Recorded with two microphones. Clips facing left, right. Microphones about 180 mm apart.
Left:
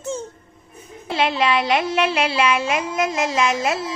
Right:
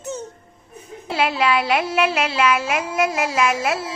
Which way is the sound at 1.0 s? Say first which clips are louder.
Even; 5° right (ahead or behind).